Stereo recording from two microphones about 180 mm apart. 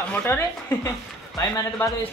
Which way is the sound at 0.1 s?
10° left (ahead or behind).